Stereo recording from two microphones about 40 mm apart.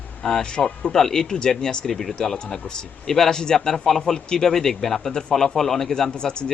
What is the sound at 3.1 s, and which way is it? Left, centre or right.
Speech, centre.